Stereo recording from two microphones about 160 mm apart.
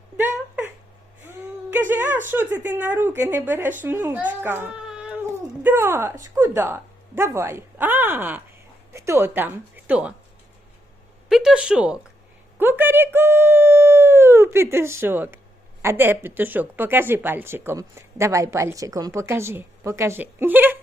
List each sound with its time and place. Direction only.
1.3 s a woman's voice: 10° right (ahead or behind)
11.3 s a woman's voice: 5° right (ahead or behind)